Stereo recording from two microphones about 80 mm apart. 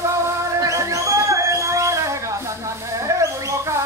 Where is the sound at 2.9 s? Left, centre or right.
Right.